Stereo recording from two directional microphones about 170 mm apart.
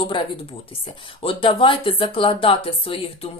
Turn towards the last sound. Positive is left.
turn(degrees=35)  # may be behind; listen again after turning